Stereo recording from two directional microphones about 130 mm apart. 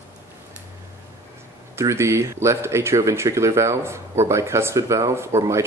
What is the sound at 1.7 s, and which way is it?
Speech, 20° right (ahead or behind).